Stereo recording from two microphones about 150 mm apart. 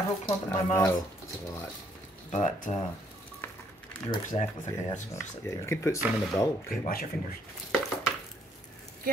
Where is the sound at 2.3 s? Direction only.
55° left (ahead or behind).